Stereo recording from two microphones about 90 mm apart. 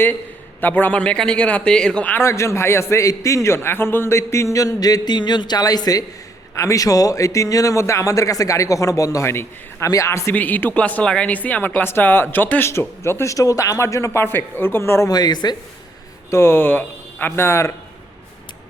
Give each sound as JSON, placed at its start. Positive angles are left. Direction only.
{"t": 0.6, "sound": "a man's voice", "side_deg": 20}
{"t": 2.2, "sound": "a man's voice", "side_deg": 30}
{"t": 10.3, "sound": "a man's voice", "side_deg": 20}
{"t": 15.1, "sound": "speech", "side_deg": 50}
{"t": 16.3, "sound": "speech", "side_deg": 25}